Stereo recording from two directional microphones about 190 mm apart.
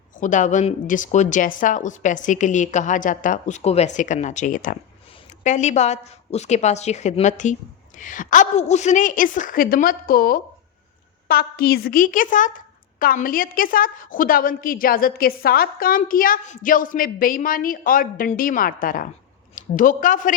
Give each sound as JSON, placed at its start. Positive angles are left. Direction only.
{"t": 0.2, "sound": "a woman's voice", "side_deg": 40}